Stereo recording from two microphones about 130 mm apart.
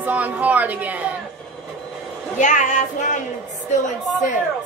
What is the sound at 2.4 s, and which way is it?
Speech, 70° left (ahead or behind).